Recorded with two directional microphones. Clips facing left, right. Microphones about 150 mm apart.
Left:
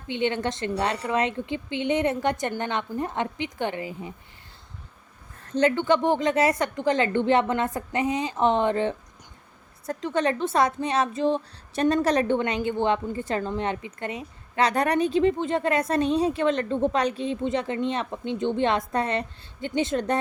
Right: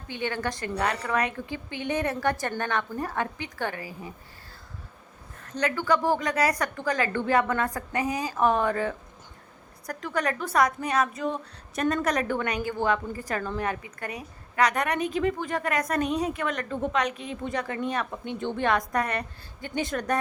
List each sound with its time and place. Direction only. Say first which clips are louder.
0.1 s a woman's voice: left 5 dB; 20° left (ahead or behind)
5.4 s a woman's voice: left 6 dB; 30° left (ahead or behind)